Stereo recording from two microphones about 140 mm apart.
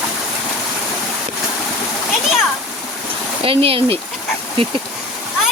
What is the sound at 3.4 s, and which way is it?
Speech, 40° right (ahead or behind).